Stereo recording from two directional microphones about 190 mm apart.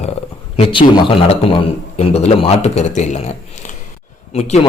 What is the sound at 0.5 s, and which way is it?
A man's voice, 30° left (ahead or behind).